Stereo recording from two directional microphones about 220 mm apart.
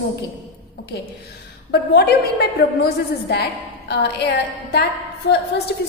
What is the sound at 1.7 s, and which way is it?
A woman's voice, 50° left (ahead or behind).